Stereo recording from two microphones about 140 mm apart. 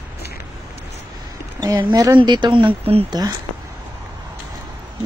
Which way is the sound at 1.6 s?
25° right (ahead or behind).